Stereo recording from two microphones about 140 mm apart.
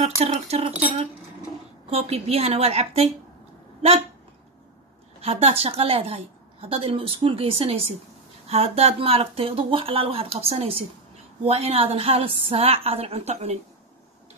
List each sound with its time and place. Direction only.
0.0 s a woman's voice: 50° right (ahead or behind)
5.2 s a woman's voice: 45° right (ahead or behind)